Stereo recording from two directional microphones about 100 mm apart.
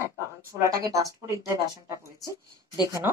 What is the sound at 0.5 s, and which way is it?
Speech, 35° right (ahead or behind).